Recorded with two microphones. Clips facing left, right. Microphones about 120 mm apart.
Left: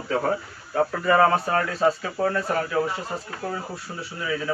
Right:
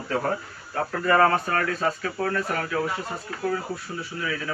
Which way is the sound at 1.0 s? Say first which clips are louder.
Even; 10° left (ahead or behind).